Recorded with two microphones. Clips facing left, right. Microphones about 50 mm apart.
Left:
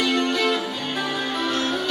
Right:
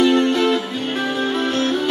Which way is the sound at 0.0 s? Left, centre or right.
Right.